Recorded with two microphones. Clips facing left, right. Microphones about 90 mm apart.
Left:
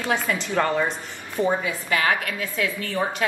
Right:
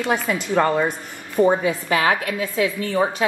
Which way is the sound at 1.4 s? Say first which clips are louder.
Right 3 dB; 30° right (ahead or behind).